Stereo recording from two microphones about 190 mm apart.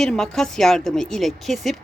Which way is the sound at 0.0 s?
Centre (ahead or behind).